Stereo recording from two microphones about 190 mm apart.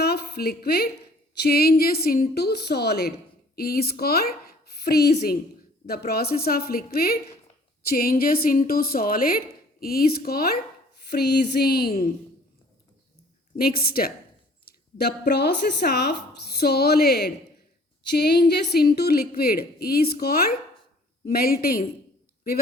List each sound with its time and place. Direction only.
0.0 s a sound: 55° left (ahead or behind)
1.4 s a woman's voice: 55° left (ahead or behind)
13.6 s a woman's voice: 50° left (ahead or behind)